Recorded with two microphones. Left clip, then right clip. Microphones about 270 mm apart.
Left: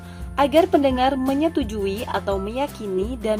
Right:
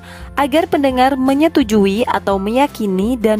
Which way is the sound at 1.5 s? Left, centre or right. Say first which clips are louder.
Right 10 dB; right.